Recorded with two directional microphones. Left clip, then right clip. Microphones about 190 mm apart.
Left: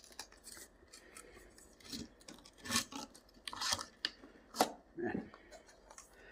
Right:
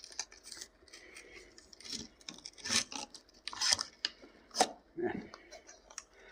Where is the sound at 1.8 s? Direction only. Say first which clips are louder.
Right 4 dB; 20° right (ahead or behind).